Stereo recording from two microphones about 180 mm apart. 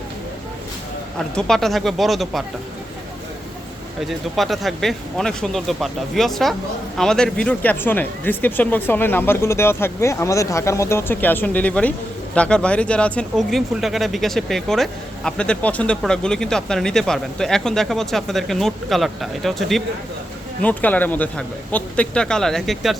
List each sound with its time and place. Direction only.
1.4 s speech: centre (ahead or behind)
4.0 s speech: centre (ahead or behind)